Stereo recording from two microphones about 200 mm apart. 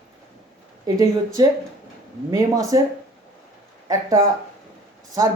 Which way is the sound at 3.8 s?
15° right (ahead or behind).